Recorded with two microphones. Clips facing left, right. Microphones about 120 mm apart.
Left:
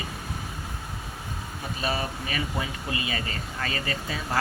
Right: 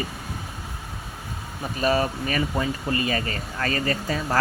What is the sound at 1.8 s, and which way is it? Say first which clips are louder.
Speech: right 8 dB; 45° right (ahead or behind).